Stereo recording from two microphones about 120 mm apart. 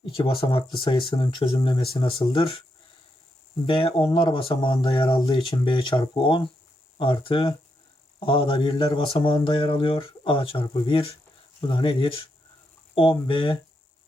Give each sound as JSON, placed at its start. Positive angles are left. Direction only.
{"t": 0.4, "sound": "speech", "side_deg": 45}
{"t": 3.7, "sound": "speech", "side_deg": 50}